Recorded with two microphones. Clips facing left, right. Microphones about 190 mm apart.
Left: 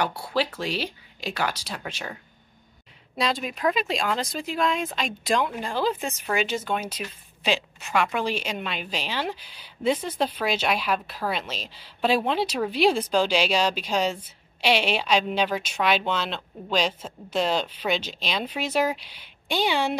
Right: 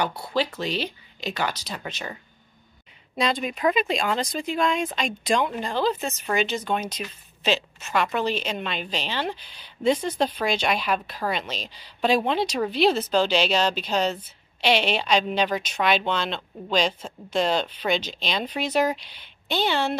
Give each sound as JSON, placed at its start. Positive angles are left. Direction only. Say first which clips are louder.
{"t": 0.0, "sound": "a woman's voice", "louder": "even", "side_deg": 10}
{"t": 3.2, "sound": "a woman's voice", "louder": "right 2 dB", "side_deg": 0}